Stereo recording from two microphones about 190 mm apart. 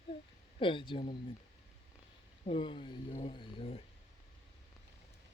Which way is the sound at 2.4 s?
25° left (ahead or behind).